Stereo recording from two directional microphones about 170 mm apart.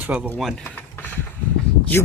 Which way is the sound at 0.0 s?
5° right (ahead or behind).